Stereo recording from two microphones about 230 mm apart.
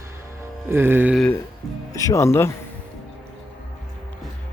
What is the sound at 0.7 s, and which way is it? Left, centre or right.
Speech, centre.